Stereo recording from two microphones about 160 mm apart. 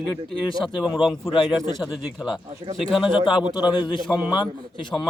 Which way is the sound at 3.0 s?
30° left (ahead or behind).